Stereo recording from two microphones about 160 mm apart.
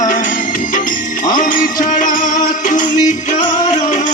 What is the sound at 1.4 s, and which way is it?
Music, 60° left (ahead or behind).